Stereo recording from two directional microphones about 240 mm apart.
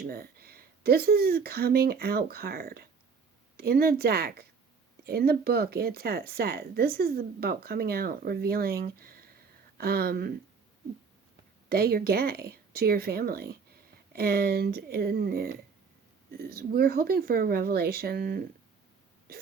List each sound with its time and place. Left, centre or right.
0.0 s speech: right
11.7 s speech: right